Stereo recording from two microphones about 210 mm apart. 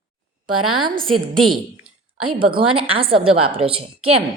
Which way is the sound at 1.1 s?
Centre (ahead or behind).